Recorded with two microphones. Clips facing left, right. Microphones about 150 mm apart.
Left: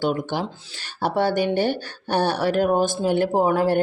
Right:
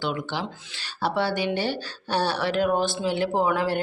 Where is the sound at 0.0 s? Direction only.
45° left (ahead or behind).